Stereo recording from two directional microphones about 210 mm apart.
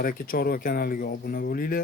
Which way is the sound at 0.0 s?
45° left (ahead or behind).